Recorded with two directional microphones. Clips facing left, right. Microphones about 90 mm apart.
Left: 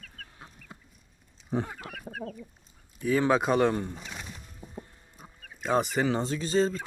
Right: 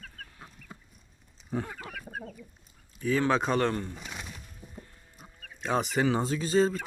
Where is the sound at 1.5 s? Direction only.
25° left (ahead or behind).